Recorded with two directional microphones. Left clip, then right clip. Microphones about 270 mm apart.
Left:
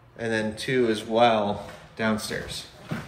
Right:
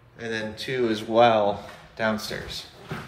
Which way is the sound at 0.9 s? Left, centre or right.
Right.